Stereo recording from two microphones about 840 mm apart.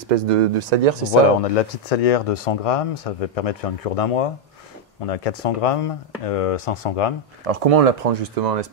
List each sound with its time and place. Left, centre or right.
0.1 s speech: right
1.9 s speech: left
7.4 s speech: right